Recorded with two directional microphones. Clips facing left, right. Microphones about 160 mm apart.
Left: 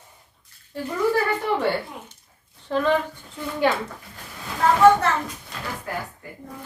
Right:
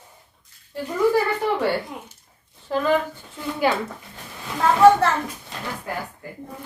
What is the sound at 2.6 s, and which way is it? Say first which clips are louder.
Speech: even; 5° right (ahead or behind).